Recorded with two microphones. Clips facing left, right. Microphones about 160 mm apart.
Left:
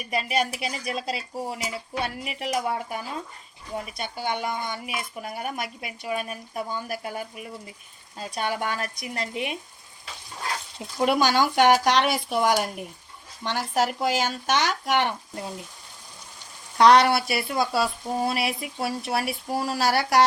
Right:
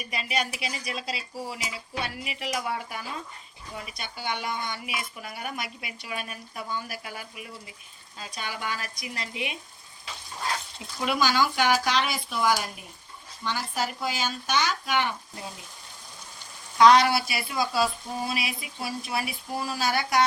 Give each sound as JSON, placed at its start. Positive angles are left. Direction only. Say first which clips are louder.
{"t": 0.1, "sound": "speech", "louder": "left 5 dB", "side_deg": 45}
{"t": 8.2, "sound": "speech", "louder": "left 7 dB", "side_deg": 55}
{"t": 10.8, "sound": "speech", "louder": "left 6 dB", "side_deg": 50}
{"t": 13.4, "sound": "speech", "louder": "left 5 dB", "side_deg": 70}
{"t": 16.7, "sound": "speech", "louder": "left 1 dB", "side_deg": 60}